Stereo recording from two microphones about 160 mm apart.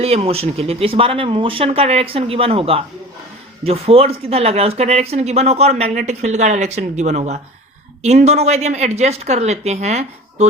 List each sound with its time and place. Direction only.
0.0 s a woman's voice: 40° right (ahead or behind)